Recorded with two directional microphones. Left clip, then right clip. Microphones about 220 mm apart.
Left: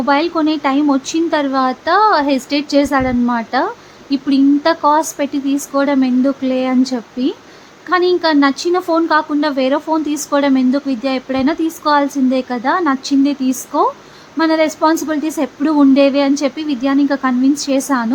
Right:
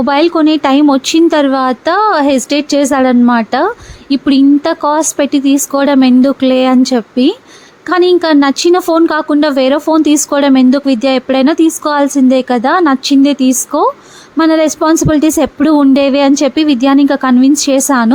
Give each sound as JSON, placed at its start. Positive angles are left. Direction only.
{"t": 0.0, "sound": "speech", "side_deg": -35}